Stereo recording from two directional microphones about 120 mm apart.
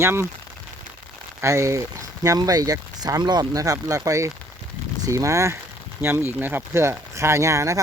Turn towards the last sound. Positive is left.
turn(degrees=-25)  # may be behind; listen again after turning